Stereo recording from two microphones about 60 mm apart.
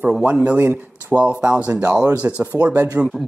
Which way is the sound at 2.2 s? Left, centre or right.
Right.